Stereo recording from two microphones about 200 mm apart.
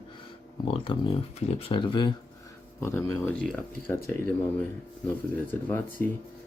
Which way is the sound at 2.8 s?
15° left (ahead or behind).